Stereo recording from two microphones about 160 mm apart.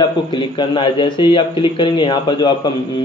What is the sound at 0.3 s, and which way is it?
A man's voice, 30° left (ahead or behind).